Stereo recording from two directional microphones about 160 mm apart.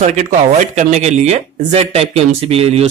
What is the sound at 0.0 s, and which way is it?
Speech, 50° right (ahead or behind).